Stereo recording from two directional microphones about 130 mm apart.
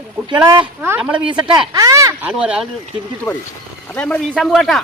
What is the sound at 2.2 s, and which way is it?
Speech, 10° right (ahead or behind).